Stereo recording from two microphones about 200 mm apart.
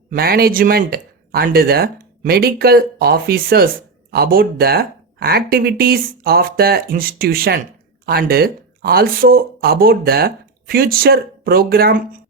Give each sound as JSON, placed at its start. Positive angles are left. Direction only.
{"t": 0.1, "sound": "speech", "side_deg": -50}